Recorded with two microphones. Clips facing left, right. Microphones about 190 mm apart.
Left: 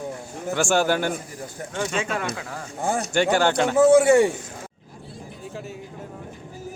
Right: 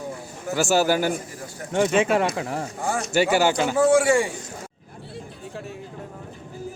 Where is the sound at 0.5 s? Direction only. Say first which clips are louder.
Right 1 dB; 5° right (ahead or behind).